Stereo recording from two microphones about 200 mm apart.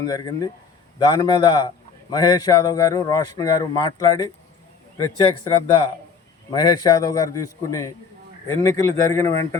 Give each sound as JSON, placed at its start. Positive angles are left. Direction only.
{"t": 0.0, "sound": "a man's voice", "side_deg": 20}
{"t": 5.5, "sound": "a man's voice", "side_deg": 25}